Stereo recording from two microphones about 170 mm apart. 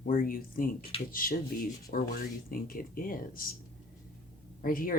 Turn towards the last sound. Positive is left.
turn(degrees=55)  # may be behind; listen again after turning